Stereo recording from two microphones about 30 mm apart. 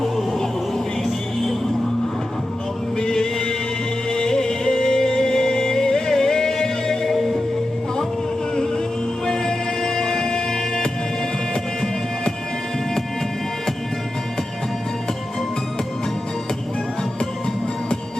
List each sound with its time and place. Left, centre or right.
3.0 s music: left
8.5 s music: left